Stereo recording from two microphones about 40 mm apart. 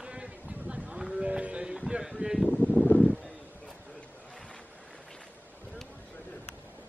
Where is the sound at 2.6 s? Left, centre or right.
Right.